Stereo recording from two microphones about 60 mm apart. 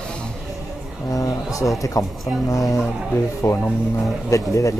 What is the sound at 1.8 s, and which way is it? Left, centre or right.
Speech, left.